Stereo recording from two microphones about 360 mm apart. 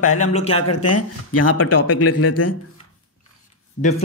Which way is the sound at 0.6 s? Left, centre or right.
Left.